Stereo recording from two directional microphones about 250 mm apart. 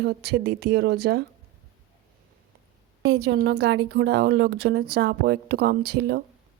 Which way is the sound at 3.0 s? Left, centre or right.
Right.